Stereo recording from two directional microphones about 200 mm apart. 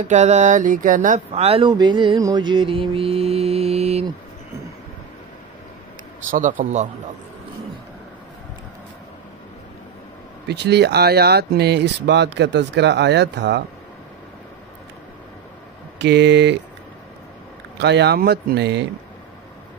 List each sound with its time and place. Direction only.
0.0 s speech: 35° right (ahead or behind)
6.3 s speech: 40° right (ahead or behind)
10.5 s speech: 55° right (ahead or behind)
16.0 s speech: 60° right (ahead or behind)
17.7 s speech: 60° right (ahead or behind)